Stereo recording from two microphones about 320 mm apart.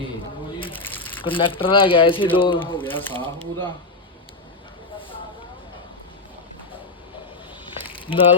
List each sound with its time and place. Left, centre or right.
1.2 s speech: centre
3.2 s speech: centre
7.6 s a sound: centre